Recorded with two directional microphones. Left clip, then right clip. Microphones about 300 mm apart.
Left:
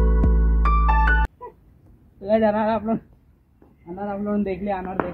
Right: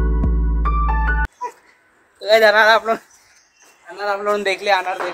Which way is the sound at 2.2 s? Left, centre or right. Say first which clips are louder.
Right 8 dB; centre.